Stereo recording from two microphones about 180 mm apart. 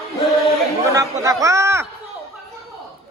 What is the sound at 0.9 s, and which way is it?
Speech, 15° right (ahead or behind).